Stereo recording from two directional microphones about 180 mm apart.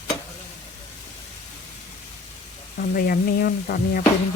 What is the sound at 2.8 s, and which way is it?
Speech, 55° left (ahead or behind).